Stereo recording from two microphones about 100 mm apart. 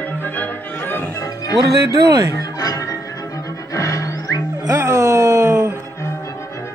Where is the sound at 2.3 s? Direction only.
35° left (ahead or behind).